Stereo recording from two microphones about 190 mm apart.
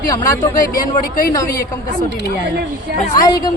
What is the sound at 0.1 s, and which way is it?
Speech, 15° left (ahead or behind).